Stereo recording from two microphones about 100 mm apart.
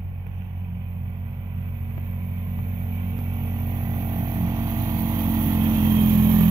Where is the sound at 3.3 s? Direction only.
35° right (ahead or behind).